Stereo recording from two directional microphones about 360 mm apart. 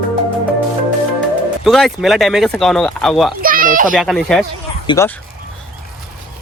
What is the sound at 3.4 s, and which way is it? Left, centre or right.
Speech, right.